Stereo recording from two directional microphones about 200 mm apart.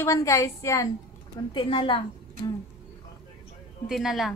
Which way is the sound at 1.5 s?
25° left (ahead or behind).